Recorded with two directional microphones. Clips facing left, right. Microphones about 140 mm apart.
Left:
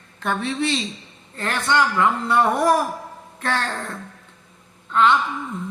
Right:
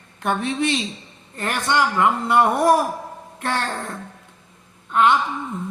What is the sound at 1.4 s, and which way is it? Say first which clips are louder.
Speech: even; 15° right (ahead or behind).